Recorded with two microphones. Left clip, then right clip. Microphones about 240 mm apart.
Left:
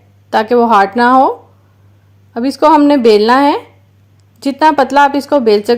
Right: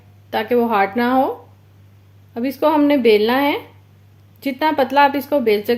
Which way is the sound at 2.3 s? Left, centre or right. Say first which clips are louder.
Left 8 dB; left.